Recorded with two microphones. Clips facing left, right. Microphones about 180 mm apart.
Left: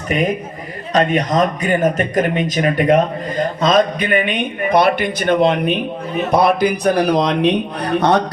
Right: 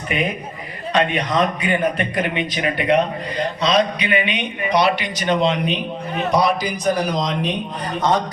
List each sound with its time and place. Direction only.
0.1 s speech: 45° left (ahead or behind); by 8.2 s 65° left (ahead or behind)